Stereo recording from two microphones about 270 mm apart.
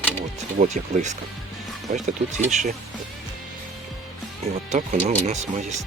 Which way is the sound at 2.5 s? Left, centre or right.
Right.